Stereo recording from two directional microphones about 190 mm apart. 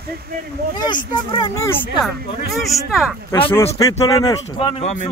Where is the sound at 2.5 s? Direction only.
Centre (ahead or behind).